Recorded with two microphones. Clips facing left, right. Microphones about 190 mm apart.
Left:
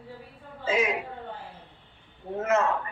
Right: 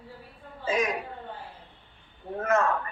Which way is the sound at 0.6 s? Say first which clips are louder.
Left 1 dB; 25° left (ahead or behind).